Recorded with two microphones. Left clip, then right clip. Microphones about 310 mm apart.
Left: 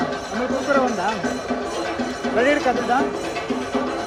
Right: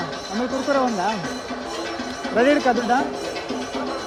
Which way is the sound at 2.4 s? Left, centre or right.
Right.